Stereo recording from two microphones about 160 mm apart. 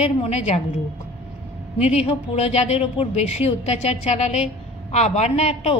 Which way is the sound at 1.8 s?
40° left (ahead or behind).